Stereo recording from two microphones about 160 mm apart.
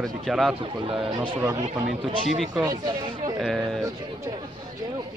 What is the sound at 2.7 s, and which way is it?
Speech, 25° right (ahead or behind).